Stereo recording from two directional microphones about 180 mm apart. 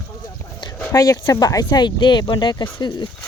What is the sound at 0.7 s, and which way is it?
Speech, 15° left (ahead or behind).